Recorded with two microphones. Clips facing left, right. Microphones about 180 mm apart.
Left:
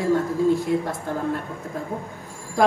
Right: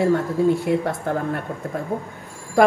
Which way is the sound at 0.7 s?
65° right (ahead or behind).